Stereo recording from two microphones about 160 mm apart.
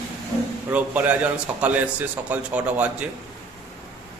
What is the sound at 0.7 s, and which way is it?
A man's voice, 10° right (ahead or behind).